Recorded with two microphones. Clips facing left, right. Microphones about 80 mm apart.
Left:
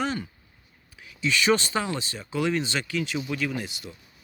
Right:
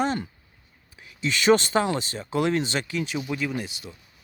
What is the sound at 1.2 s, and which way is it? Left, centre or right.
Speech, right.